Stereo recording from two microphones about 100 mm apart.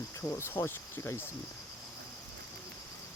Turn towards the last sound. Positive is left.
turn(degrees=25)  # may be behind; listen again after turning